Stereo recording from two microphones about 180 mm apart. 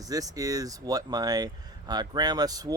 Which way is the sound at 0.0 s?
20° right (ahead or behind).